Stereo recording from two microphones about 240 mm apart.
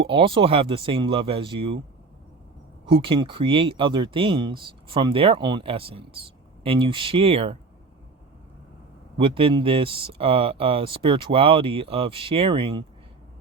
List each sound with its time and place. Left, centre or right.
0.1 s speech: right
2.8 s speech: right
9.1 s speech: right